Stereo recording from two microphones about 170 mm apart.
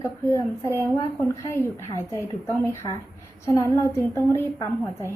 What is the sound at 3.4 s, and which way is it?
A woman's voice, 15° left (ahead or behind).